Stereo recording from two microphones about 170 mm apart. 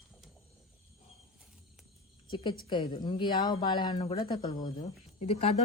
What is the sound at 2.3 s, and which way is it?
A woman's voice, 30° left (ahead or behind).